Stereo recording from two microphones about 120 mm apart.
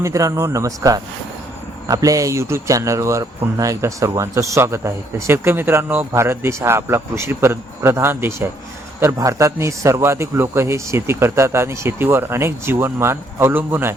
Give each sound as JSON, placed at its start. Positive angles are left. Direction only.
{"t": 0.0, "sound": "speech", "side_deg": -25}